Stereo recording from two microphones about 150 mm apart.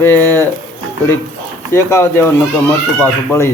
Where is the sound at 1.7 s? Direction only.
15° left (ahead or behind).